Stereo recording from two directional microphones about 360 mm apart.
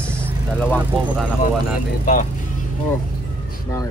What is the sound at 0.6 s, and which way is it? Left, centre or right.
Speech, centre.